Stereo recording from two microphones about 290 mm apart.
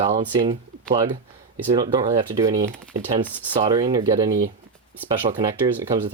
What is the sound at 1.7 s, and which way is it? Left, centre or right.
Speech, centre.